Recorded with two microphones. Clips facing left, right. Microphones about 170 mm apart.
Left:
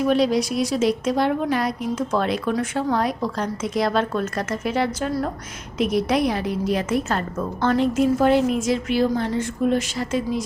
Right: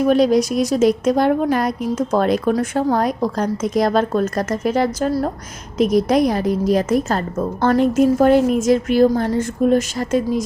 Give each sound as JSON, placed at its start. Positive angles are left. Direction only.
{"t": 0.0, "sound": "a woman's voice", "side_deg": -45}